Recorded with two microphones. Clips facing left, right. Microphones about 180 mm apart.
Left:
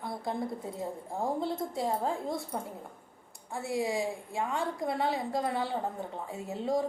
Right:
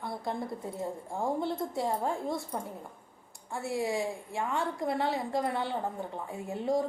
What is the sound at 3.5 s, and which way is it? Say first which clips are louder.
A woman's voice: even; 20° left (ahead or behind).